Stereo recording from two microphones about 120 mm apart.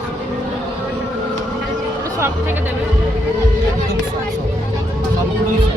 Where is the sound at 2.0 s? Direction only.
20° right (ahead or behind).